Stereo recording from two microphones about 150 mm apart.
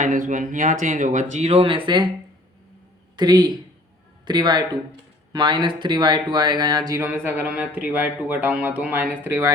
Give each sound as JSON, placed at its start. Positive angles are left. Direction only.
{"t": 0.0, "sound": "speech", "side_deg": -60}
{"t": 3.2, "sound": "speech", "side_deg": -30}